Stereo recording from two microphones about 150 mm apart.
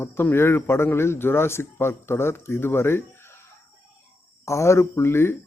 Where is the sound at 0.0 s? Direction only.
15° left (ahead or behind).